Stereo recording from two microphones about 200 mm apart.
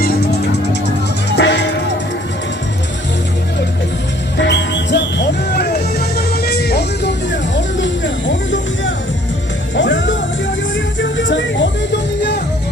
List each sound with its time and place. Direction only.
0.0 s music: 50° left (ahead or behind)
1.4 s music: 60° left (ahead or behind)
4.4 s music: 60° left (ahead or behind)